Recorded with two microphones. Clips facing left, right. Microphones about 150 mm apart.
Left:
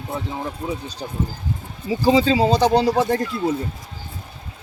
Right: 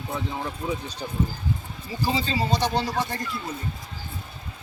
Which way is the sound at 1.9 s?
90° left.